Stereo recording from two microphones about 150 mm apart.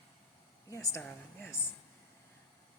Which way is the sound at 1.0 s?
15° left (ahead or behind).